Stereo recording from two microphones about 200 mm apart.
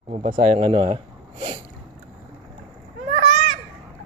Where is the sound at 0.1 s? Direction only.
40° right (ahead or behind).